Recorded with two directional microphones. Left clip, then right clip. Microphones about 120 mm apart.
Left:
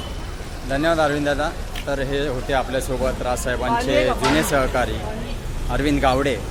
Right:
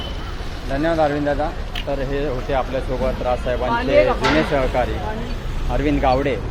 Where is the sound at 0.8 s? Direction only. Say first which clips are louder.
Right 1 dB; 50° left (ahead or behind).